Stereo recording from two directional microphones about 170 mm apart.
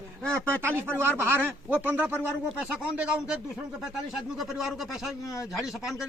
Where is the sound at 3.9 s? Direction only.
Centre (ahead or behind).